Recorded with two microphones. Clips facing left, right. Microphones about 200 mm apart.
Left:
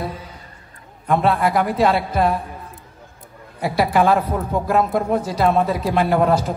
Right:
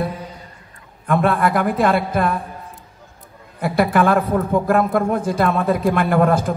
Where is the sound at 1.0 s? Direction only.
50° right (ahead or behind).